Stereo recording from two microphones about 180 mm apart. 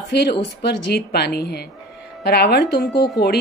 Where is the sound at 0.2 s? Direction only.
65° left (ahead or behind).